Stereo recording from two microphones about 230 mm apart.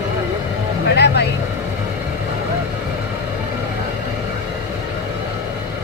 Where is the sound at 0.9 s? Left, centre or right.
Left.